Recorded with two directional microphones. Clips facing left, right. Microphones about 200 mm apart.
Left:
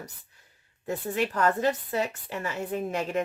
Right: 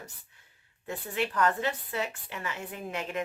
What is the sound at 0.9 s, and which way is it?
Speech, 40° left (ahead or behind).